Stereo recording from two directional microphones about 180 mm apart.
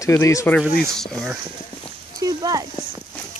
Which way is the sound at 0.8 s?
Centre (ahead or behind).